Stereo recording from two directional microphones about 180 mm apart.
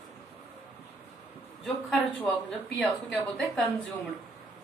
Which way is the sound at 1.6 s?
5° left (ahead or behind).